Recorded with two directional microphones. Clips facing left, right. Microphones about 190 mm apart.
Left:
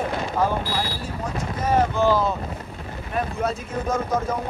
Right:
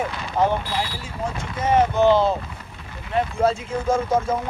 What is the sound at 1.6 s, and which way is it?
Speech, 20° right (ahead or behind).